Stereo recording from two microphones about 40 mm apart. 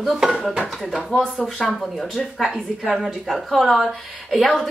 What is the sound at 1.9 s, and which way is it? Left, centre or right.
Speech, centre.